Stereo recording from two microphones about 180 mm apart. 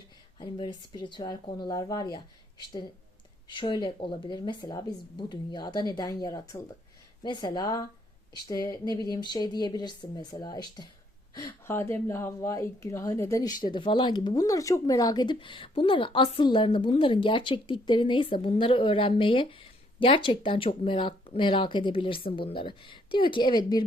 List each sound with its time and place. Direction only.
0.3 s speech: 25° left (ahead or behind)
11.6 s speech: 15° left (ahead or behind)